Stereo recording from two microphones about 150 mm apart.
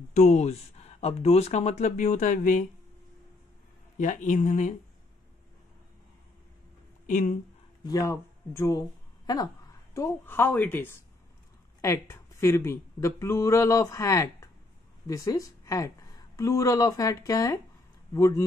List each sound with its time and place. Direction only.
0.1 s speech: 50° left (ahead or behind)
4.0 s speech: 60° left (ahead or behind)
7.1 s speech: 60° left (ahead or behind)
7.8 s a woman's voice: 25° left (ahead or behind)